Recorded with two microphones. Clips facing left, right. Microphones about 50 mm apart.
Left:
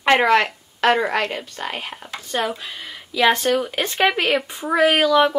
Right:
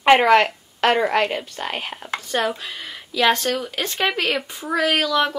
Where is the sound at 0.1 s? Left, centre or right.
Centre.